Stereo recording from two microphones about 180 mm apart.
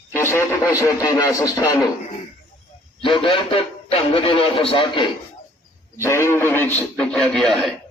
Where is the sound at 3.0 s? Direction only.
30° left (ahead or behind).